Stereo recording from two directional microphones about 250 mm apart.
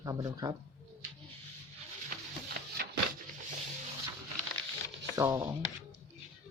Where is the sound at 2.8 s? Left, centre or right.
Right.